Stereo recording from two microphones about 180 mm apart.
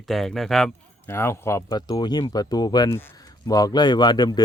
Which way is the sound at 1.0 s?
15° left (ahead or behind).